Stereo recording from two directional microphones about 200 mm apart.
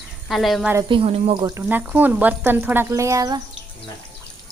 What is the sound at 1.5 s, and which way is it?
Speech, 10° right (ahead or behind).